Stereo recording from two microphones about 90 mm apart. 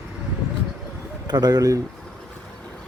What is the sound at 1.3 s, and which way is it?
Speech, 50° right (ahead or behind).